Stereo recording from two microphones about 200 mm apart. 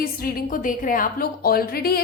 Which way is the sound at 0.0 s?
50° left (ahead or behind).